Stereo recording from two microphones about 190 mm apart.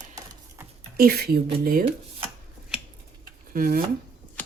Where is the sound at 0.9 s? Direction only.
55° right (ahead or behind).